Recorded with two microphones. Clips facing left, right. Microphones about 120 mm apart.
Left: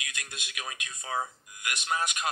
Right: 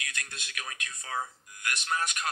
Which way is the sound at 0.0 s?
15° left (ahead or behind).